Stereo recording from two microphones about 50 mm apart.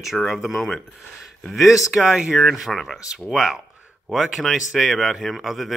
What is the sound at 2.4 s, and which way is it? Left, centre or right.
Speech, centre.